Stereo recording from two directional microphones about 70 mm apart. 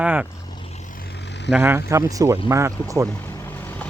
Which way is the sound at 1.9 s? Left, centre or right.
Right.